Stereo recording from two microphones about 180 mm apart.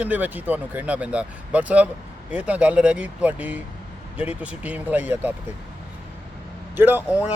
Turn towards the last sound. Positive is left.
turn(degrees=-10)  # may be behind; listen again after turning